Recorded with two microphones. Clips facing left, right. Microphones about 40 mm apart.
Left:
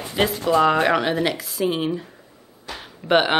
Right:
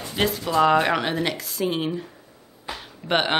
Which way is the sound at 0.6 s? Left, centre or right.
Centre.